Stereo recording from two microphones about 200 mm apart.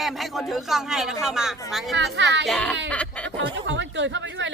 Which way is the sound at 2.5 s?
5° left (ahead or behind).